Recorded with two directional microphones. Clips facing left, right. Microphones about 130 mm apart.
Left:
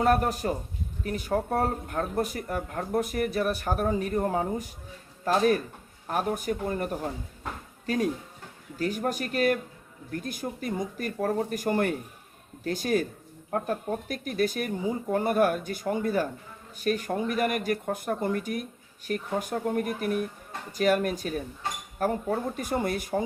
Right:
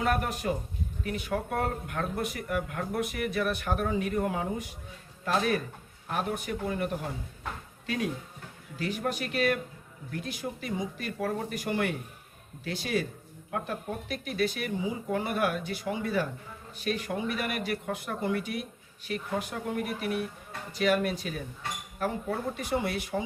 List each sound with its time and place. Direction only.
0.0 s speech: 35° left (ahead or behind)